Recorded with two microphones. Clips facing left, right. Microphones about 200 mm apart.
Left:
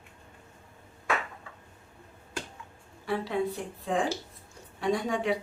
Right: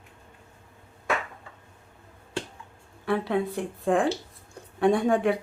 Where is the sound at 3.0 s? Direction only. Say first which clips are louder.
Right 4 dB; 60° right (ahead or behind).